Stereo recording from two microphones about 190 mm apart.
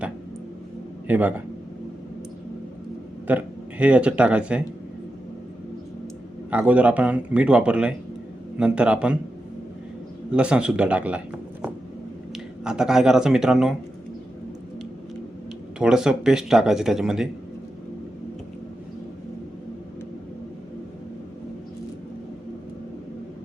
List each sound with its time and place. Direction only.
1.0 s a man's voice: 10° right (ahead or behind)
3.2 s speech: 10° right (ahead or behind)
6.5 s speech: 10° right (ahead or behind)
10.3 s speech: 5° right (ahead or behind)
12.3 s speech: 5° right (ahead or behind)
15.8 s speech: 5° right (ahead or behind)